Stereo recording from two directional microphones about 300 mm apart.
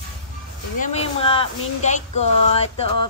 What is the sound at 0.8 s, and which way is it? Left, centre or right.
Speech, centre.